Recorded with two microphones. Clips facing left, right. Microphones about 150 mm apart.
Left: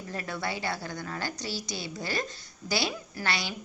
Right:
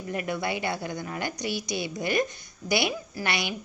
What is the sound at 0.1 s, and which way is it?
A woman's voice, 15° right (ahead or behind).